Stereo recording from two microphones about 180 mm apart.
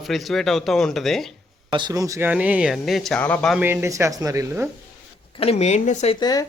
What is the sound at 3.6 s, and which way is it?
Speech, 15° right (ahead or behind).